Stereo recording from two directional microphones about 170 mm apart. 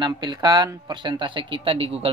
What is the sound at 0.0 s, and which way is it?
Speech, 25° right (ahead or behind).